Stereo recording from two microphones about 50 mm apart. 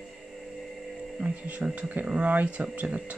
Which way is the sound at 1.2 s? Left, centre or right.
Right.